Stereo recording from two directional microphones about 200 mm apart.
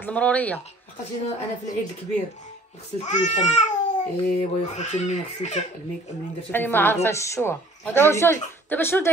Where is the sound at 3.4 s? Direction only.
35° left (ahead or behind).